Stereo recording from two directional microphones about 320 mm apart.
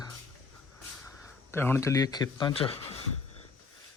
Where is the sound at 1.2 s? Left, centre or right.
Centre.